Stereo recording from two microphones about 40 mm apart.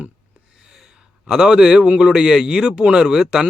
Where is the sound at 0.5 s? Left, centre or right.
Centre.